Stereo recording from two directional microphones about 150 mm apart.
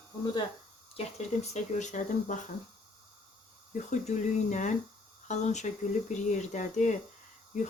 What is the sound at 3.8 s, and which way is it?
Speech, 50° left (ahead or behind).